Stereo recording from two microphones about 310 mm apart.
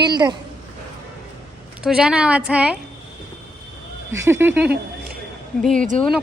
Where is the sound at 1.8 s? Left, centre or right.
Centre.